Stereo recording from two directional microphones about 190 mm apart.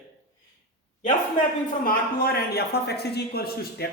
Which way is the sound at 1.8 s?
50° left (ahead or behind).